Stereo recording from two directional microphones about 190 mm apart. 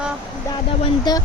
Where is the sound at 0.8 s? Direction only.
20° left (ahead or behind).